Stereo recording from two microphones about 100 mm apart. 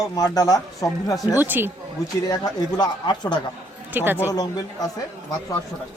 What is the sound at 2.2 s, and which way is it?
Speech, 40° left (ahead or behind).